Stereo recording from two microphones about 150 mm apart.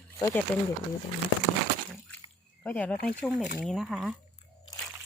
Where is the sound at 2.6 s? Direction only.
10° left (ahead or behind).